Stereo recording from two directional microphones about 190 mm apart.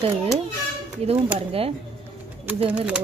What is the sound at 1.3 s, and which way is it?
Speech, 30° right (ahead or behind).